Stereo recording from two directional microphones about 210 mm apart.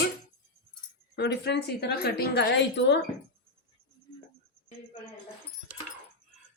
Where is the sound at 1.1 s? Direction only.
50° left (ahead or behind).